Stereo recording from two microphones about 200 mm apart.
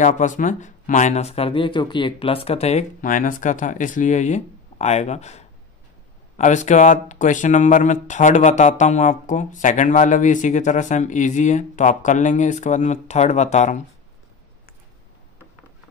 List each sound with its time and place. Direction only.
0.0 s speech: 40° left (ahead or behind)